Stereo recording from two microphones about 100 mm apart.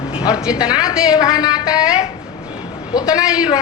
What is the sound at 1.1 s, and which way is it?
Speech, 40° left (ahead or behind).